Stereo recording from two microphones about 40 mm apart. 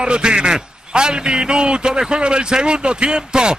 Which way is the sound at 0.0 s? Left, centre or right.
Right.